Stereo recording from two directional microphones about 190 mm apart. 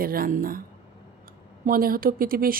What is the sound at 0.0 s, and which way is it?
Speech, 50° right (ahead or behind).